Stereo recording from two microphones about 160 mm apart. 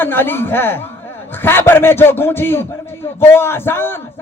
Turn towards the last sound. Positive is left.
turn(degrees=15)  # may be behind; listen again after turning